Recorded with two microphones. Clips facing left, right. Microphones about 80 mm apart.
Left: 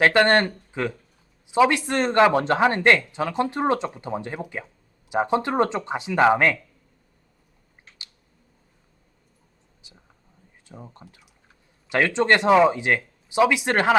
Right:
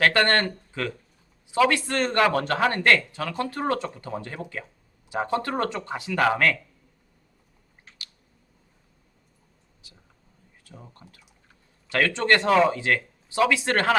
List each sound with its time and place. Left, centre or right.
0.0 s speech: centre
9.8 s vehicle: left
10.6 s a sound: left
10.9 s speech: left